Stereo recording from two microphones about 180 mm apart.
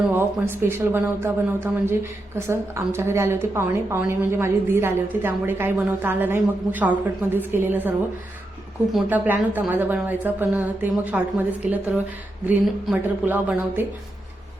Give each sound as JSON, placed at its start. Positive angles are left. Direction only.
{"t": 0.1, "sound": "speech", "side_deg": -10}
{"t": 9.0, "sound": "speech", "side_deg": -10}